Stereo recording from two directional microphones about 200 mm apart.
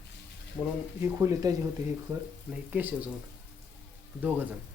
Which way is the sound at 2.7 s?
10° right (ahead or behind).